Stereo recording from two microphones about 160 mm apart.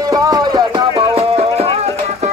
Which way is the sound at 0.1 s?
20° right (ahead or behind).